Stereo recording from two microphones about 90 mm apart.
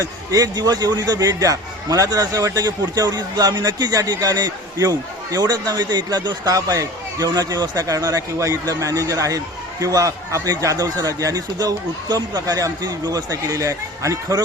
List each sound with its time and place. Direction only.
0.0 s a man's voice: 40° right (ahead or behind)